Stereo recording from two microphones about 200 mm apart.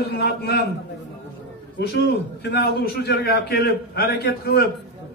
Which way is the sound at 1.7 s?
55° left (ahead or behind).